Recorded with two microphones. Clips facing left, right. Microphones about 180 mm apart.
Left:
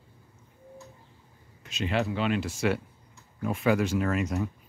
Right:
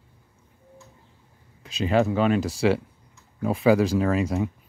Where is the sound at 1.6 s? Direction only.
35° right (ahead or behind).